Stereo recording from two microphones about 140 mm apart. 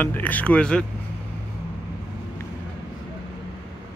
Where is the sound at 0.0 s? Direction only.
10° left (ahead or behind).